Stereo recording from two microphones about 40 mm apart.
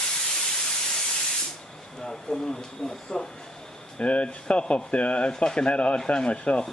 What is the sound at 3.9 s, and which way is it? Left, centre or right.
Speech, left.